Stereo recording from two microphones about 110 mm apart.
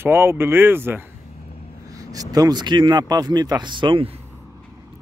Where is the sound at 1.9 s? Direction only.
30° right (ahead or behind).